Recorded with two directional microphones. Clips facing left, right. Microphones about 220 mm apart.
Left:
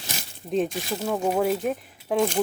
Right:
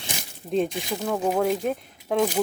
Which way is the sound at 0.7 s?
15° right (ahead or behind).